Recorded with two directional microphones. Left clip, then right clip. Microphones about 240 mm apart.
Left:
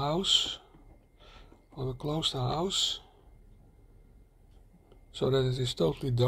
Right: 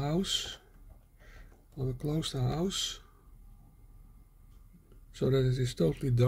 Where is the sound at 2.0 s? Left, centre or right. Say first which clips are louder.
Left 5 dB; right.